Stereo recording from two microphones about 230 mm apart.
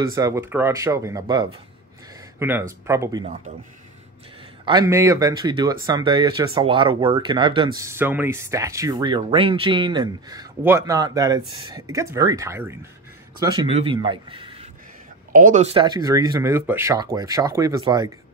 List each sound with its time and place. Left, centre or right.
0.0 s speech: centre
4.6 s speech: centre
15.3 s speech: right; by 18.1 s centre